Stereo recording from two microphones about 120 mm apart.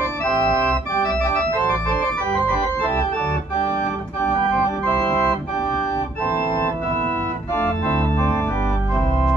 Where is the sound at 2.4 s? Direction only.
10° left (ahead or behind).